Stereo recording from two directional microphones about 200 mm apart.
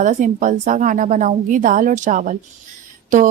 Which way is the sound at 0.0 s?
40° right (ahead or behind).